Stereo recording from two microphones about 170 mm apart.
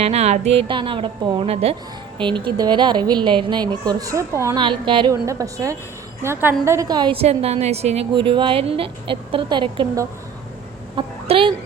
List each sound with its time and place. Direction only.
0.0 s a woman's voice: 40° right (ahead or behind); by 4.6 s 15° right (ahead or behind)
4.6 s a woman's voice: 30° right (ahead or behind)
10.9 s a sound: 30° right (ahead or behind)